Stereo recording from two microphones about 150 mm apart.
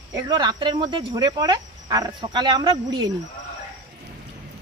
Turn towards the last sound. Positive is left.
turn(degrees=-30)  # may be behind; listen again after turning